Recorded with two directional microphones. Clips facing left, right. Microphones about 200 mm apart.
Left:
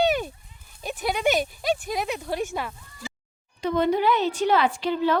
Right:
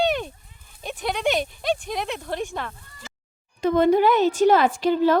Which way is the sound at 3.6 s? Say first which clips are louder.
Right 4 dB; 50° right (ahead or behind).